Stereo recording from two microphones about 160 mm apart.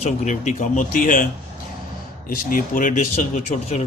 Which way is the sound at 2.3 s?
60° left (ahead or behind).